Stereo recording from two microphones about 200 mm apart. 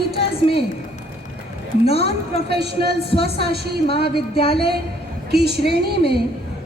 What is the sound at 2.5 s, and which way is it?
Speech, 55° right (ahead or behind).